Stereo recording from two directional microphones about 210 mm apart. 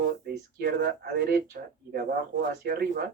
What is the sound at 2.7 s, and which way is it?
Speech, 50° right (ahead or behind).